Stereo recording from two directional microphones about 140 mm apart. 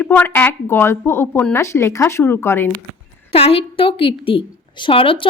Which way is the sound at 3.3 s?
45° left (ahead or behind).